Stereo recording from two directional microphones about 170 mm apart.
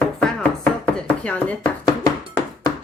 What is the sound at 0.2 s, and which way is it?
Chopping, 5° left (ahead or behind).